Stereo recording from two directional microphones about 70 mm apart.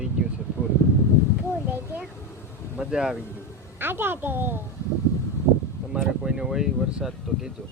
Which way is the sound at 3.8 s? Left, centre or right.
Right.